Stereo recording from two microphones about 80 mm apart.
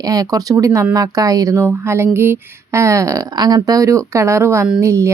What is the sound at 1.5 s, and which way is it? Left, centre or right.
Speech, right.